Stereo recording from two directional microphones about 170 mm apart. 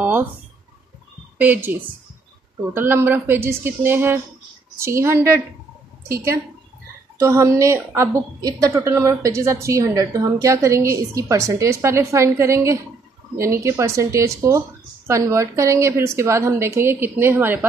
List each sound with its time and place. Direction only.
0.0 s a sound: 10° right (ahead or behind)
1.4 s a woman's voice: 10° right (ahead or behind)
7.2 s a woman's voice: 20° right (ahead or behind)